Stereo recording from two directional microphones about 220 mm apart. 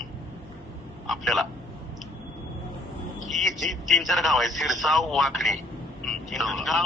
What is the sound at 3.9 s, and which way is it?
A man's voice, centre (ahead or behind).